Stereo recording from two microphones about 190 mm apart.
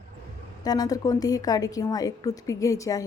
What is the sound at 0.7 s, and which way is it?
A woman's voice, 20° left (ahead or behind).